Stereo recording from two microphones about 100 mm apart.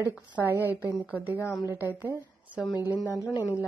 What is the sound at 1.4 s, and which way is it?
Speech, 40° left (ahead or behind).